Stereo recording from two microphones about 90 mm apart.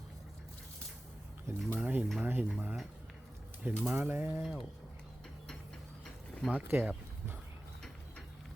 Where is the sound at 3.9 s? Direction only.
20° right (ahead or behind).